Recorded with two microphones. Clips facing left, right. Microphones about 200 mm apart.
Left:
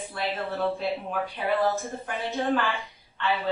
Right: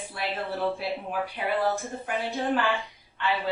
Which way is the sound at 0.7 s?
15° right (ahead or behind).